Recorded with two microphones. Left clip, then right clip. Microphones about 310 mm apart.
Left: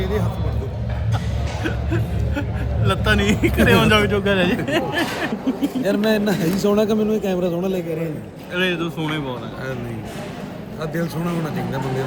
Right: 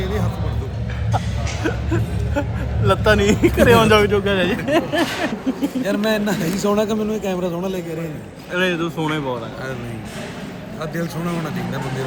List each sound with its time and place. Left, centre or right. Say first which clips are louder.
0.0 s music: left 1 dB; centre
1.6 s music: right 3 dB; centre
2.8 s speech: right 4 dB; centre
8.5 s speech: right 2 dB; centre
10.9 s speech: left 1 dB; centre